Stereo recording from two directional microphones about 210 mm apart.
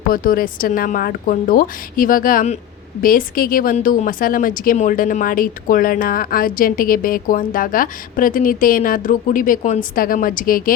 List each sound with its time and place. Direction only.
0.1 s speech: 45° left (ahead or behind)